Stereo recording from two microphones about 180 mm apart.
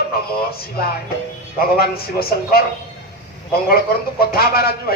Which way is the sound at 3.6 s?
55° left (ahead or behind).